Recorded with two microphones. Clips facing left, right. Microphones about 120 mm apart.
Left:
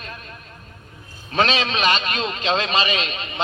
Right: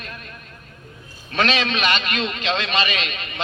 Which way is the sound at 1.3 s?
35° left (ahead or behind).